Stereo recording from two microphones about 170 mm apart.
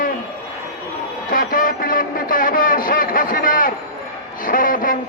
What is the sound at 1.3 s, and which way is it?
A man's voice, 55° left (ahead or behind).